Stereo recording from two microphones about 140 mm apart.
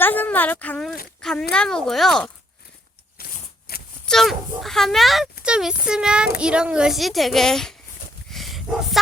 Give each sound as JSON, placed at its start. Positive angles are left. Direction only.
{"t": 0.0, "sound": "speech", "side_deg": 15}
{"t": 3.2, "sound": "shuffling cards", "side_deg": 90}
{"t": 3.7, "sound": "a sound", "side_deg": 90}
{"t": 4.0, "sound": "speech", "side_deg": 5}
{"t": 8.3, "sound": "dog", "side_deg": 0}